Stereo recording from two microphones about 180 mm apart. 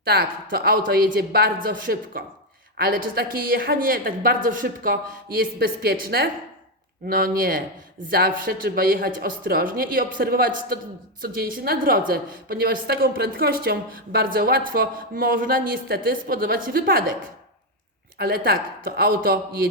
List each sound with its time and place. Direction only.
0.0 s a woman's voice: 60° right (ahead or behind)
18.2 s a woman's voice: 55° right (ahead or behind)